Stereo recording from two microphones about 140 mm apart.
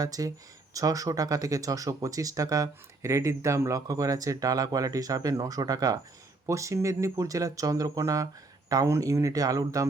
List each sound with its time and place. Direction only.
0.0 s speech: 25° right (ahead or behind)